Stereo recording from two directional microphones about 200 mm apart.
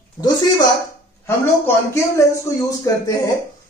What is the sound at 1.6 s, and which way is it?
Speech, 15° left (ahead or behind).